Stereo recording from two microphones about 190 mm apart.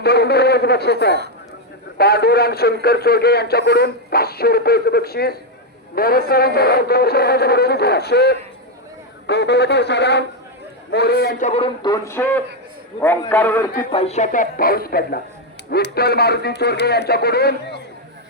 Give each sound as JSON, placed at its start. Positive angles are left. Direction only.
{"t": 0.0, "sound": "speech", "side_deg": 60}
{"t": 11.3, "sound": "a man's voice", "side_deg": 35}
{"t": 13.9, "sound": "speech", "side_deg": 35}